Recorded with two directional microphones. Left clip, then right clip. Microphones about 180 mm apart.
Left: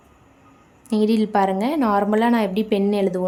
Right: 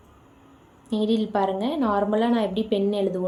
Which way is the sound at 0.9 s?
40° left (ahead or behind).